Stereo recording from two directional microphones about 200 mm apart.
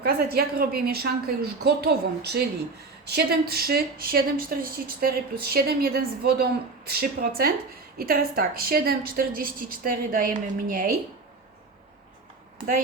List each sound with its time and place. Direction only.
0.0 s speech: 50° right (ahead or behind)